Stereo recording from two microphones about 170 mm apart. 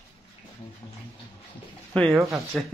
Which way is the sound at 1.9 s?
5° left (ahead or behind).